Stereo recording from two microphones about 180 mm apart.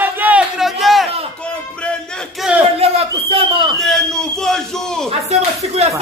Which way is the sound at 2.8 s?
30° right (ahead or behind).